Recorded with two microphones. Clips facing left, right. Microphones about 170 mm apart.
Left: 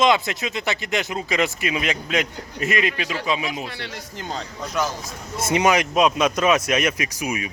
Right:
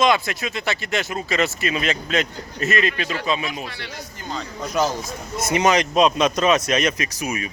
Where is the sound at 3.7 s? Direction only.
60° left (ahead or behind).